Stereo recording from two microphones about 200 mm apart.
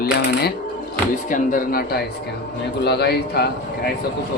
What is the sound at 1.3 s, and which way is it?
Speech, 45° left (ahead or behind).